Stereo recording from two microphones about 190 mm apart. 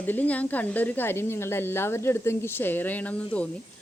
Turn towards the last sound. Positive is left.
turn(degrees=5)  # may be behind; listen again after turning